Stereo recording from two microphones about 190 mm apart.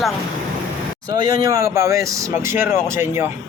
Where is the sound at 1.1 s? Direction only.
20° right (ahead or behind).